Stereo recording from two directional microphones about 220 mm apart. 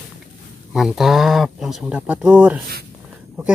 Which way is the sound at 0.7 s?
Centre (ahead or behind).